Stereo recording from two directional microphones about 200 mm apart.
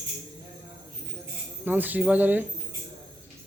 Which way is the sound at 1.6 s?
10° right (ahead or behind).